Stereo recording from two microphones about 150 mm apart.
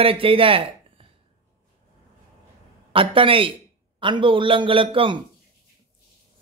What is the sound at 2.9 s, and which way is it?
A man's voice, 35° right (ahead or behind).